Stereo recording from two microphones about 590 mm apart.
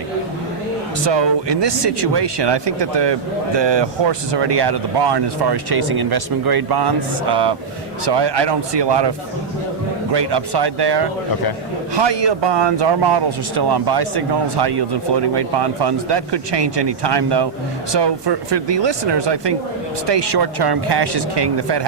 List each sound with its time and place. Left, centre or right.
1.0 s speech: right